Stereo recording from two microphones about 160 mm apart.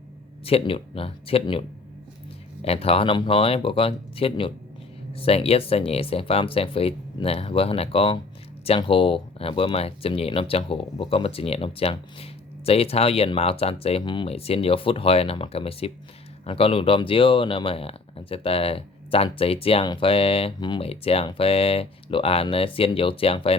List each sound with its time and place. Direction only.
0.4 s speech: 35° left (ahead or behind)